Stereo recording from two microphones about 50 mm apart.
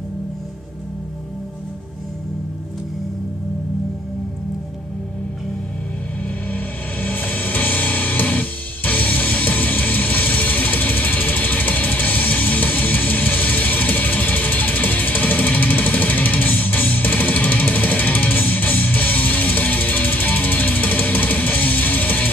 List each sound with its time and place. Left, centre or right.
6.5 s music: left